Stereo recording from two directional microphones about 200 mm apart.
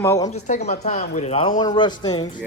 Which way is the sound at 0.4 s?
35° left (ahead or behind).